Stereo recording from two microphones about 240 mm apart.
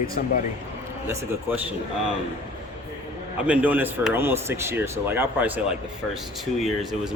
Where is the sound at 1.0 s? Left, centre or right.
Centre.